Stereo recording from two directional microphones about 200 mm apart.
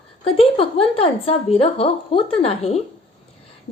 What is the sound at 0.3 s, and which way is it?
A woman's voice, 30° left (ahead or behind).